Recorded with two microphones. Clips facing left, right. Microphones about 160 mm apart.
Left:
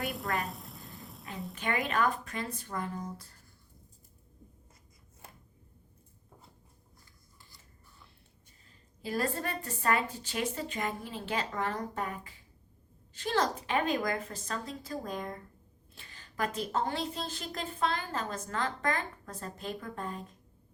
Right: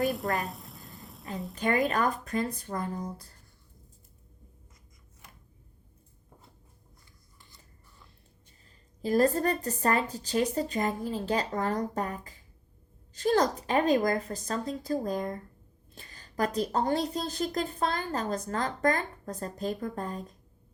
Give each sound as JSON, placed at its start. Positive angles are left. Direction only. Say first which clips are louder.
{"t": 0.0, "sound": "a sound", "louder": "right 5 dB", "side_deg": 0}
{"t": 1.5, "sound": "a woman's voice", "louder": "right 5 dB", "side_deg": -40}
{"t": 9.0, "sound": "a woman's voice", "louder": "right 9 dB", "side_deg": -40}